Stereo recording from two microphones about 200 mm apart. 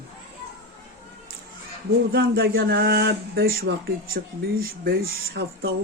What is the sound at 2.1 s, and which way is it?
Speech, 50° right (ahead or behind).